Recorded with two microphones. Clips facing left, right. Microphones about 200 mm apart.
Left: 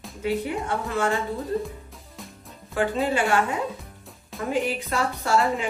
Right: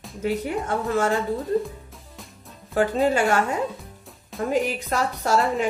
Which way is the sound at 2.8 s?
40° right (ahead or behind).